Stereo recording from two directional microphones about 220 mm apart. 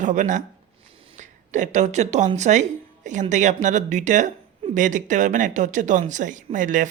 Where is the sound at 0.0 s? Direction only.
35° right (ahead or behind).